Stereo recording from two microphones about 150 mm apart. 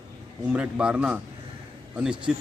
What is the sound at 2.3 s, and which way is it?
Speech, 5° right (ahead or behind).